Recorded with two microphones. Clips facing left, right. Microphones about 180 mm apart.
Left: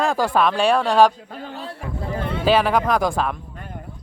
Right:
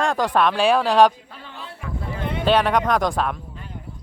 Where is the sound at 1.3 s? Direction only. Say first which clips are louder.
Left 7 dB; 45° left (ahead or behind).